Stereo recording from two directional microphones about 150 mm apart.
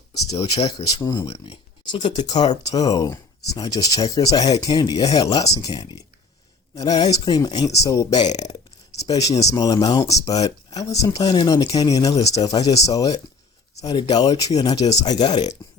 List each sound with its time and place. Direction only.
0.3 s speech: 35° left (ahead or behind)